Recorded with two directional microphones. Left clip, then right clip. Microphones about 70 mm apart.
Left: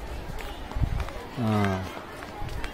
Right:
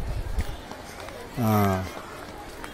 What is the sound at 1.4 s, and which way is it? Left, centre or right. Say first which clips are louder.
Speech: right 4 dB; right.